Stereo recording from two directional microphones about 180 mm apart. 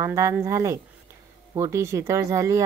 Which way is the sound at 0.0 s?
15° right (ahead or behind).